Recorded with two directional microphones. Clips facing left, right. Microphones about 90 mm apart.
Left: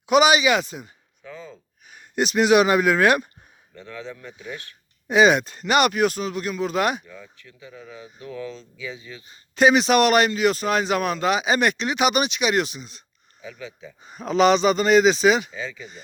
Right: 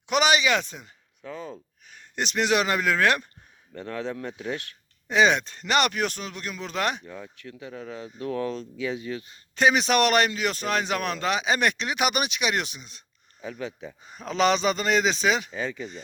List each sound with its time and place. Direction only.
0.0 s speech: 10° left (ahead or behind)
1.9 s speech: 10° left (ahead or behind)
3.8 s speech: 60° right (ahead or behind)
5.0 s speech: 10° left (ahead or behind)
7.0 s speech: 45° right (ahead or behind); by 9.2 s 60° right (ahead or behind)
9.3 s a man's voice: 5° left (ahead or behind)
13.4 s speech: 50° right (ahead or behind)
14.0 s a man's voice: centre (ahead or behind)
15.5 s speech: 45° right (ahead or behind)